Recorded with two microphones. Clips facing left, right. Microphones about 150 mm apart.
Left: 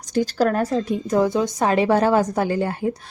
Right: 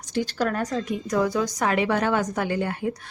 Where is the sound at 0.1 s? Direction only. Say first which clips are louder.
Left 6 dB; 40° left (ahead or behind).